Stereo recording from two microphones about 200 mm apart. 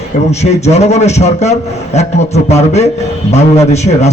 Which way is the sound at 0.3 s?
35° left (ahead or behind).